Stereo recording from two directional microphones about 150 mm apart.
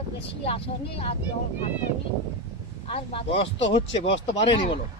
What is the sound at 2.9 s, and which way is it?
Speech, 40° left (ahead or behind).